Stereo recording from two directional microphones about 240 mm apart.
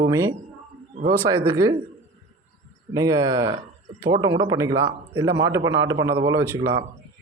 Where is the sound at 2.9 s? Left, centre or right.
Centre.